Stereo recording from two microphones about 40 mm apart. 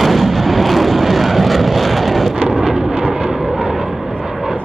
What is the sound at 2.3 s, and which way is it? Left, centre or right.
Vehicle, right.